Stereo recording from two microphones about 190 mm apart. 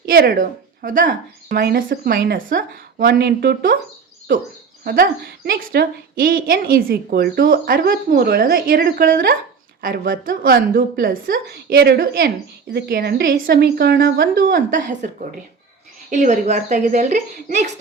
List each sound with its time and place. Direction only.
0.0 s speech: 50° right (ahead or behind)
4.8 s a woman's voice: 50° right (ahead or behind)